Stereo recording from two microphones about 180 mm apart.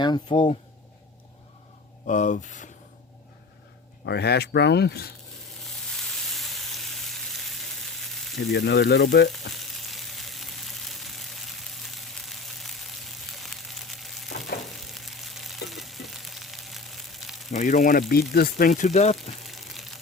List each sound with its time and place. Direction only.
0.0 s speech: 25° left (ahead or behind)
2.0 s speech: 45° left (ahead or behind)
4.0 s speech: 65° left (ahead or behind)
5.6 s frying: centre (ahead or behind)
8.4 s speech: 70° left (ahead or behind)
9.5 s frying: centre (ahead or behind)
17.5 s speech: 45° left (ahead or behind)
18.1 s speech: 60° left (ahead or behind)
18.5 s speech: 45° left (ahead or behind)
19.4 s a sound: centre (ahead or behind)